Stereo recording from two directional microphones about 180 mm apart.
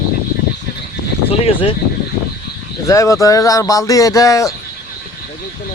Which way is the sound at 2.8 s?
15° left (ahead or behind).